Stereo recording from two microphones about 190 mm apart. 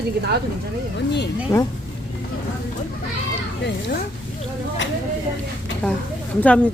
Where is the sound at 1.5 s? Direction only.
15° left (ahead or behind).